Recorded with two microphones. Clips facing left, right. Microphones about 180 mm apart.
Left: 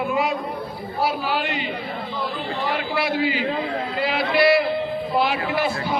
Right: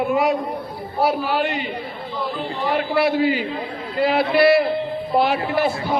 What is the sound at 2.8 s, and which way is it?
Speech, 50° right (ahead or behind).